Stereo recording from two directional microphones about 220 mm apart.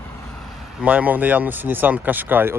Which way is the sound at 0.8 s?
5° right (ahead or behind).